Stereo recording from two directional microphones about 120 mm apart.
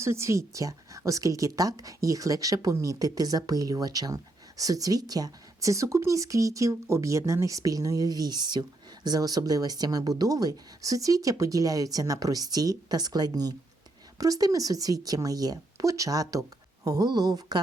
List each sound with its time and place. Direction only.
0.0 s a woman's voice: 25° right (ahead or behind)